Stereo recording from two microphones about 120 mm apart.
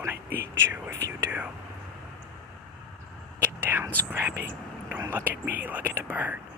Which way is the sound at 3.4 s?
15° right (ahead or behind).